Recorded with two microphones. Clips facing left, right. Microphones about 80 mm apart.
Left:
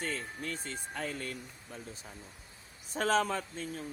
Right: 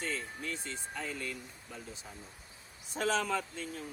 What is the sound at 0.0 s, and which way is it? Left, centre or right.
Speech, left.